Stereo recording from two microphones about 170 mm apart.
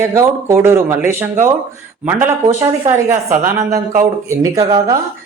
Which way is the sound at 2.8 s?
15° right (ahead or behind).